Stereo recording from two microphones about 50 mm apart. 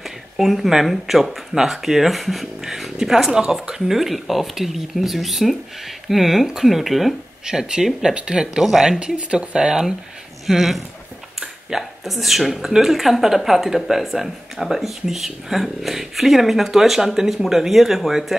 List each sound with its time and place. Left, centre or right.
0.0 s speech: centre
7.4 s speech: centre
9.0 s speech: centre
9.6 s speech: centre